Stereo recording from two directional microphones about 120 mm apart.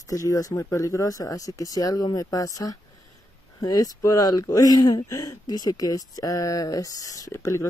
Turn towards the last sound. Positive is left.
turn(degrees=25)  # may be behind; listen again after turning